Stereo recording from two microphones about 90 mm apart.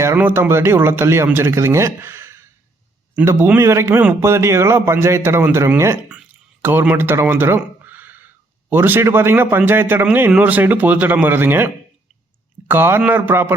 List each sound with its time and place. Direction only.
0.2 s speech: 25° right (ahead or behind)